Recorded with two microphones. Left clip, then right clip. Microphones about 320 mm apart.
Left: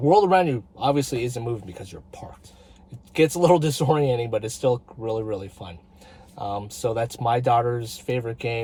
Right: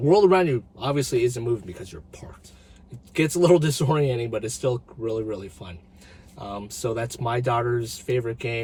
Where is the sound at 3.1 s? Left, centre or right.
Centre.